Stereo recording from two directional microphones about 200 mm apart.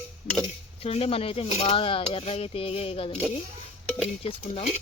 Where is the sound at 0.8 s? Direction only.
30° left (ahead or behind).